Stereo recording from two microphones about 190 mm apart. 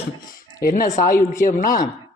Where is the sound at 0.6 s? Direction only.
45° left (ahead or behind).